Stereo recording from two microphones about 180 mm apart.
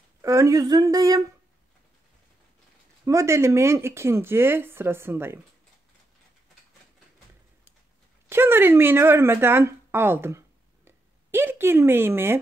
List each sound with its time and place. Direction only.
0.2 s speech: 15° right (ahead or behind)
3.1 s speech: 15° right (ahead or behind)
8.3 s speech: 15° right (ahead or behind)